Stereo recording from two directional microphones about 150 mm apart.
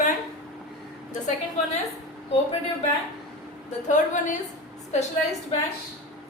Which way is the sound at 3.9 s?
60° left (ahead or behind).